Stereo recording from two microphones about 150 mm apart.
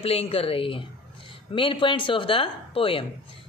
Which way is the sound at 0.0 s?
40° left (ahead or behind).